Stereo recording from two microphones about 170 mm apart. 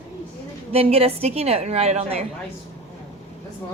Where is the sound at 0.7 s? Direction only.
35° right (ahead or behind).